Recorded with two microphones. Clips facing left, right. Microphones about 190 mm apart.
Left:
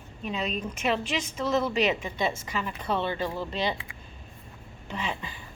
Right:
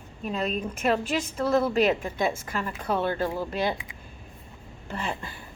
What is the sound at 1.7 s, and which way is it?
Speech, 55° right (ahead or behind).